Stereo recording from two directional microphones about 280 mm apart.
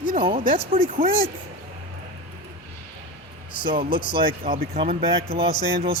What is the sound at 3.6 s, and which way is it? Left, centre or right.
Speech, centre.